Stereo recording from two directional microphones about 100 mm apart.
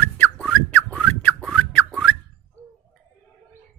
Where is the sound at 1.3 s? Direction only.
5° left (ahead or behind).